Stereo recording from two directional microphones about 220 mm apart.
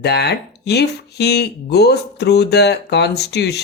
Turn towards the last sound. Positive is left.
turn(degrees=50)  # may be behind; listen again after turning